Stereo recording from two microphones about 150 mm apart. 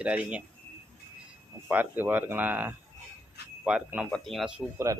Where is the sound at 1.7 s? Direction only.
10° right (ahead or behind).